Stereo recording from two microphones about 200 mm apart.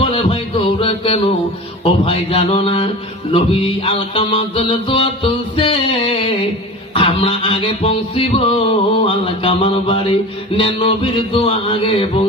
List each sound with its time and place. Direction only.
0.0 s music: 25° left (ahead or behind)
1.8 s mantra: 30° left (ahead or behind)